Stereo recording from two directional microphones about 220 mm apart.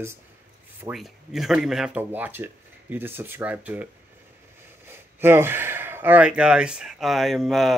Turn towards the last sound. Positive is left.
turn(degrees=0)  # may be behind; listen again after turning